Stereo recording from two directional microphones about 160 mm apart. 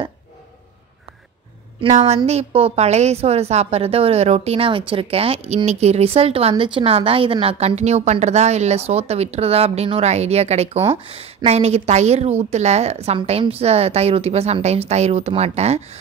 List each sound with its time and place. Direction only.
1.8 s a woman's voice: 40° right (ahead or behind)